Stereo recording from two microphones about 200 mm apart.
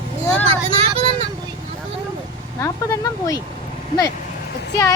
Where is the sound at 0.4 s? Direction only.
30° right (ahead or behind).